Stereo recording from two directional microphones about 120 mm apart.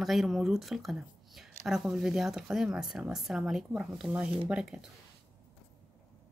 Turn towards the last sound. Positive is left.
turn(degrees=-5)  # may be behind; listen again after turning